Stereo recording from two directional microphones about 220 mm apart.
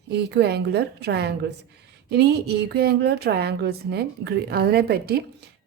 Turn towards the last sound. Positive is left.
turn(degrees=-45)  # may be behind; listen again after turning